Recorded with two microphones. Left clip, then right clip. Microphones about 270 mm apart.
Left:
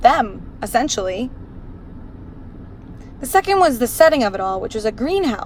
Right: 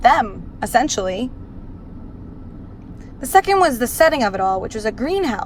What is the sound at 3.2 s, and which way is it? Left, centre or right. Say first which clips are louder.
Speech: right 1 dB; centre.